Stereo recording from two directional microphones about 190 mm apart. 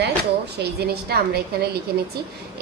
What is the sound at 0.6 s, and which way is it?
Speech, 60° right (ahead or behind).